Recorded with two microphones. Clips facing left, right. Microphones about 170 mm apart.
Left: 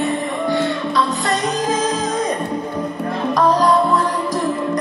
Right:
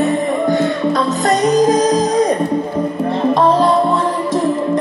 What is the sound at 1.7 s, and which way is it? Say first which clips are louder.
Music: right 7 dB; 40° right (ahead or behind).